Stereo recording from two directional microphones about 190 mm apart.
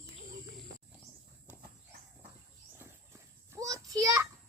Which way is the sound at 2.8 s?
15° right (ahead or behind).